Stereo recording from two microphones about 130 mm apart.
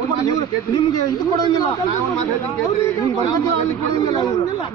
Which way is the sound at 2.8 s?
30° left (ahead or behind).